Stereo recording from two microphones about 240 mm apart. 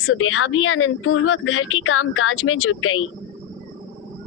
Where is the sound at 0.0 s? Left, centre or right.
Left.